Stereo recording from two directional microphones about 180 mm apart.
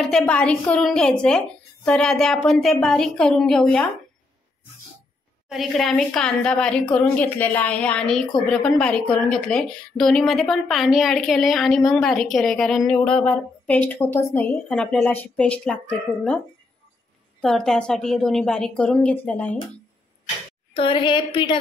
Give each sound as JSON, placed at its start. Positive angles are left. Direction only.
{"t": 0.0, "sound": "a woman's voice", "side_deg": 5}
{"t": 5.5, "sound": "a woman's voice", "side_deg": 0}
{"t": 17.4, "sound": "a woman's voice", "side_deg": 5}
{"t": 20.7, "sound": "a woman's voice", "side_deg": 30}